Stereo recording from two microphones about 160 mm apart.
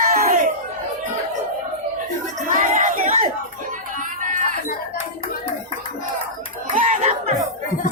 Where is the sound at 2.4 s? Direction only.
55° right (ahead or behind).